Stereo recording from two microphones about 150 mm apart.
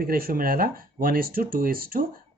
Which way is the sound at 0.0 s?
80° right.